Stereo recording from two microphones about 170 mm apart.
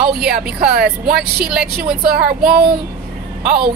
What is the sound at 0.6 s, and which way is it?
Speech, 65° right (ahead or behind).